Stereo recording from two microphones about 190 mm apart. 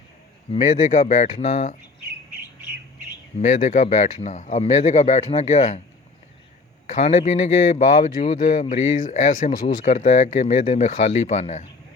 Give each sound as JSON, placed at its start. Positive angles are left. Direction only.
{"t": 0.5, "sound": "speech", "side_deg": 35}
{"t": 3.3, "sound": "speech", "side_deg": 35}
{"t": 6.8, "sound": "speech", "side_deg": 35}